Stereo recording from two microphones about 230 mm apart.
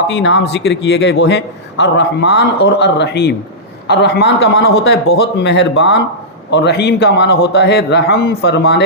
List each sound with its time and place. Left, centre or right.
0.1 s a man's voice: left